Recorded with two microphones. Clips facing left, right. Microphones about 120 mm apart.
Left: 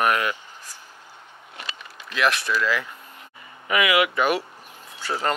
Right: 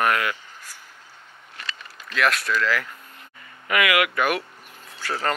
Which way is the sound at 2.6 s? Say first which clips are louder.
Even; 20° left (ahead or behind).